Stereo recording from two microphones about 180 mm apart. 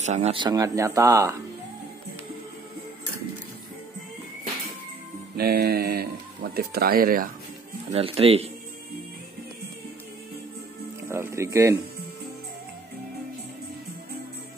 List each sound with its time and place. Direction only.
0.0 s speech: 40° right (ahead or behind); by 1.4 s 15° right (ahead or behind)
5.3 s speech: 60° right (ahead or behind)
7.9 s speech: 30° right (ahead or behind)
11.1 s speech: 15° right (ahead or behind)